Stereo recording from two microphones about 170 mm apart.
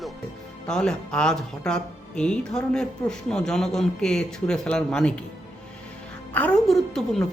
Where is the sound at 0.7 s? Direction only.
5° left (ahead or behind).